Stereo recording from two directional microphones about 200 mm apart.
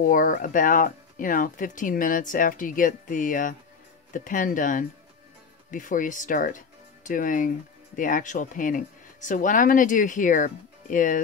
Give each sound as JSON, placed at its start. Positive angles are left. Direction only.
{"t": 0.0, "sound": "speech", "side_deg": 45}